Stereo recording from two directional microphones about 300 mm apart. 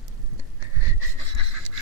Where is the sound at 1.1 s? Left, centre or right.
Right.